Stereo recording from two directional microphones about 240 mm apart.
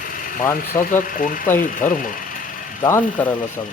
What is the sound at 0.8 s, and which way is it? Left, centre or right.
Speech, left.